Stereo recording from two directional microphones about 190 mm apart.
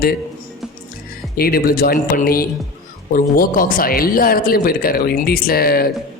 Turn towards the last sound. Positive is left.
turn(degrees=55)  # may be behind; listen again after turning